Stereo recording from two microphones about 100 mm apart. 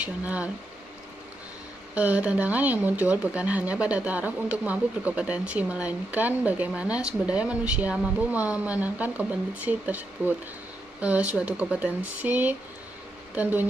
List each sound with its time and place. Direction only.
0.0 s speech: 15° right (ahead or behind)
2.0 s speech: 15° right (ahead or behind)